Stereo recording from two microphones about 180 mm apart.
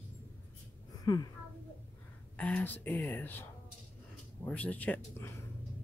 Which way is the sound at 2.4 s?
10° left (ahead or behind).